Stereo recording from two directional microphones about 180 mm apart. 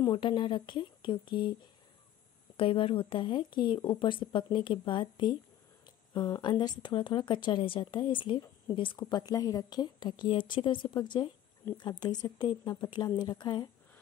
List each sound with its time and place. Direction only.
0.0 s a woman's voice: 25° left (ahead or behind)
2.5 s a woman's voice: 30° left (ahead or behind)